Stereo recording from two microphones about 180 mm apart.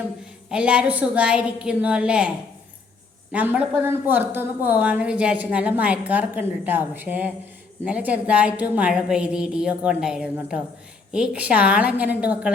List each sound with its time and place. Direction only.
0.5 s speech: 5° right (ahead or behind)
3.3 s a woman's voice: 10° right (ahead or behind)